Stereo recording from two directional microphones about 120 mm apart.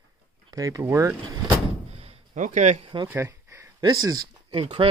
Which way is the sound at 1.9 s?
55° right (ahead or behind).